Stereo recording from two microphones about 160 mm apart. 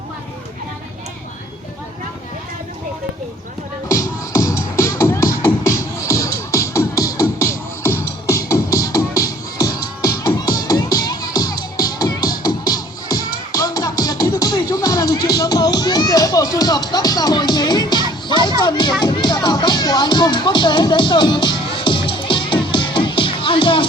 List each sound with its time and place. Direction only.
3.8 s music: 20° left (ahead or behind)